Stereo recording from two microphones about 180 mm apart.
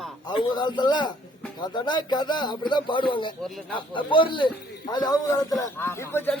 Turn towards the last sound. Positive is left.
turn(degrees=10)  # may be behind; listen again after turning